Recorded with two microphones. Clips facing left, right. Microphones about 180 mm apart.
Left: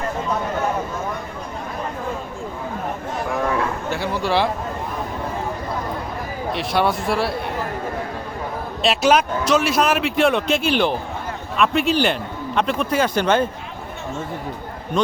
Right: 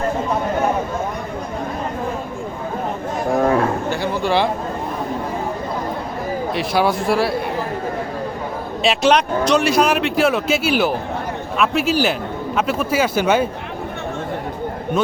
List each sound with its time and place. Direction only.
3.2 s a sound: 40° right (ahead or behind)
3.8 s a man's voice: centre (ahead or behind)
6.5 s speech: centre (ahead or behind)
8.8 s speech: 5° left (ahead or behind)
14.9 s speech: 5° right (ahead or behind)